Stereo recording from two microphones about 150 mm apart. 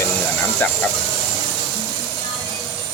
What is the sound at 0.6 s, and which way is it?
Speech, 10° left (ahead or behind).